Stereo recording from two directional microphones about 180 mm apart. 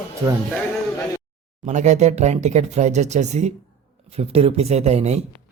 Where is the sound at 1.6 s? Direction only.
40° right (ahead or behind).